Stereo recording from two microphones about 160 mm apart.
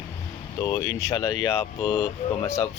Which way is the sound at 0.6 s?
20° left (ahead or behind).